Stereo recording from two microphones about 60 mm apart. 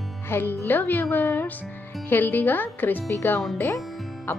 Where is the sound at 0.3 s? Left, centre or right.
Left.